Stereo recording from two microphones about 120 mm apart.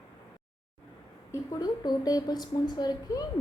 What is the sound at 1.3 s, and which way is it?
A woman's voice, 35° left (ahead or behind).